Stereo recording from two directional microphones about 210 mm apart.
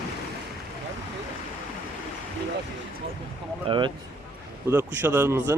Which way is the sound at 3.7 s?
25° right (ahead or behind).